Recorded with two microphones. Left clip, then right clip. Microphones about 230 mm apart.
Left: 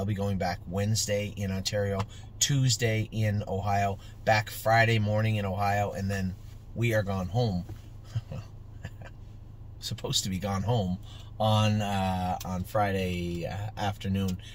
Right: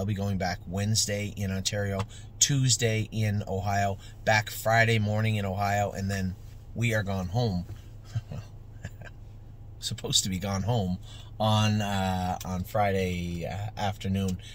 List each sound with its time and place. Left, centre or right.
0.0 s speech: centre
9.8 s speech: centre